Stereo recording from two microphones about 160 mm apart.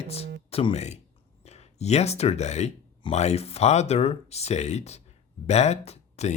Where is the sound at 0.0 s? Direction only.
40° left (ahead or behind).